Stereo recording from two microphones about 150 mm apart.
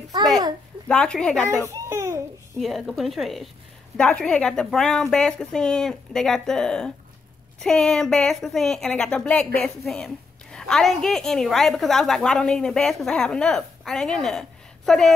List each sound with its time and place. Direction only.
0.8 s speech: 5° left (ahead or behind)
1.9 s babbling: 20° right (ahead or behind)
2.6 s a woman's voice: centre (ahead or behind)